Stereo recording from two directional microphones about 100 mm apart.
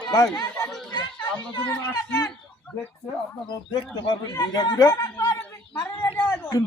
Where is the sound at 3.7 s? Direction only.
45° left (ahead or behind).